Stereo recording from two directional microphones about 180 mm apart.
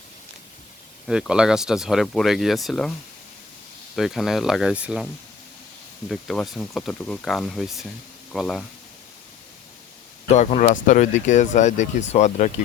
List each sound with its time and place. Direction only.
1.0 s speech: 5° right (ahead or behind)
3.9 s speech: centre (ahead or behind)
6.1 s speech: centre (ahead or behind)
10.2 s speech: 40° left (ahead or behind)